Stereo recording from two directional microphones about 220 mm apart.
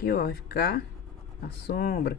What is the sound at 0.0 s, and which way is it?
Speech, 45° left (ahead or behind).